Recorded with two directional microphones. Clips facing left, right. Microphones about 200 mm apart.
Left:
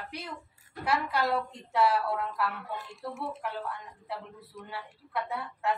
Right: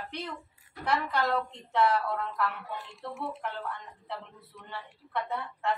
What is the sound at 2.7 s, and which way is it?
Speech, 45° left (ahead or behind).